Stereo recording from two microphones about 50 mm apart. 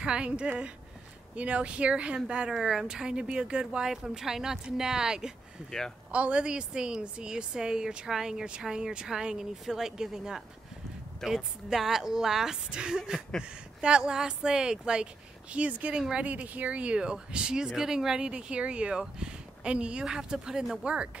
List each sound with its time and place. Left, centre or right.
0.0 s speech: centre
2.5 s speech: centre
5.7 s speech: centre
6.1 s speech: right; by 20.8 s centre
20.8 s speech: right